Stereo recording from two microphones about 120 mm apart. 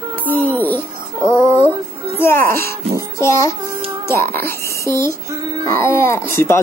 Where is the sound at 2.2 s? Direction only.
20° left (ahead or behind).